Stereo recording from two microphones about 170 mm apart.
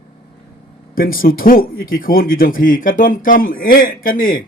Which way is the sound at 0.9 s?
55° left (ahead or behind).